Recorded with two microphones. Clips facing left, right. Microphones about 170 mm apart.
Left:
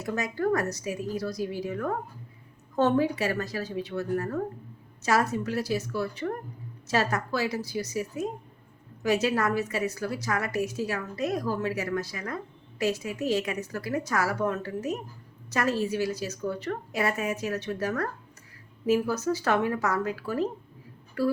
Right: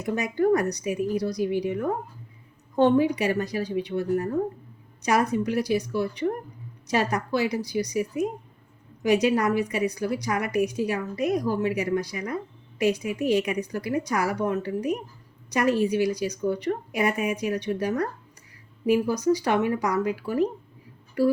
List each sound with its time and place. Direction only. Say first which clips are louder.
0.0 s a woman's voice: right 4 dB; 20° right (ahead or behind)